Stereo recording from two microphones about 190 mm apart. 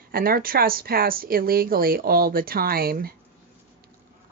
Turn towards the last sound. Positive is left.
turn(degrees=-55)  # may be behind; listen again after turning